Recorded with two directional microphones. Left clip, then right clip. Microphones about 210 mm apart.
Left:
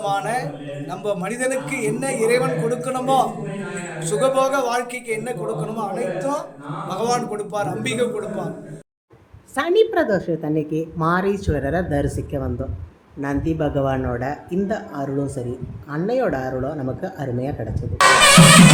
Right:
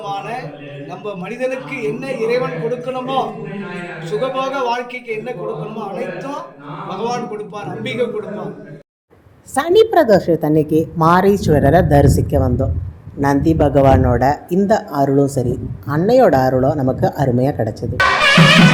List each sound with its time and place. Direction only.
0.0 s a man's voice: 20° left (ahead or behind)
6.8 s a man's voice: 30° left (ahead or behind); by 8.4 s 50° left (ahead or behind)
9.6 s speech: 20° right (ahead or behind)